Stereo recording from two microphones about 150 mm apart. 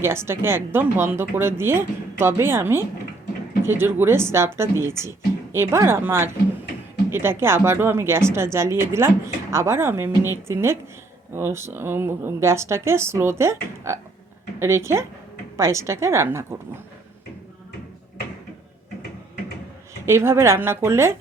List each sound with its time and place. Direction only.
0.0 s speech: 15° right (ahead or behind)
20.1 s speech: 15° right (ahead or behind)